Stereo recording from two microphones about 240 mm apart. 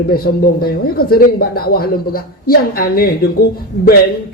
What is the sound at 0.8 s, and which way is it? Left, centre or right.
Speech, left.